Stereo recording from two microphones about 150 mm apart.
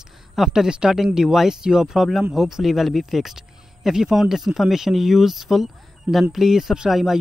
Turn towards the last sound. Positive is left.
turn(degrees=-5)  # may be behind; listen again after turning